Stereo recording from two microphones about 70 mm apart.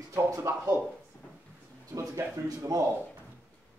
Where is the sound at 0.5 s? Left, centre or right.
Right.